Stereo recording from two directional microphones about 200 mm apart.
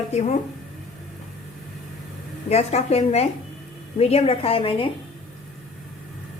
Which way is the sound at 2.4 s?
30° left (ahead or behind).